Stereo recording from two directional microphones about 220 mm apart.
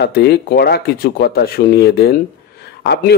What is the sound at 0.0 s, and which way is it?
A man's voice, 50° left (ahead or behind).